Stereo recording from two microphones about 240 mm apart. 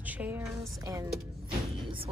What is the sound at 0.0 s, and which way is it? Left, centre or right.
Speech, centre.